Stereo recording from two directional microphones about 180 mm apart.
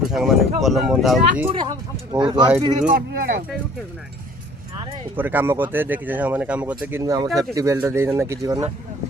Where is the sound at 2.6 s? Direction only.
35° right (ahead or behind).